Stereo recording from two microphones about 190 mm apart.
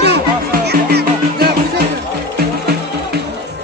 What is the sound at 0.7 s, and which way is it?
Music, 55° right (ahead or behind).